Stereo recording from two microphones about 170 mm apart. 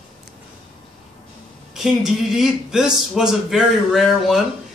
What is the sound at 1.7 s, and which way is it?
Speech, centre (ahead or behind).